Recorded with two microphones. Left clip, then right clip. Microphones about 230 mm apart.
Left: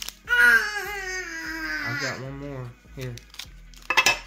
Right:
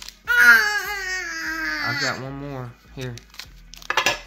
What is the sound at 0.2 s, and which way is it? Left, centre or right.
Baby cry, right.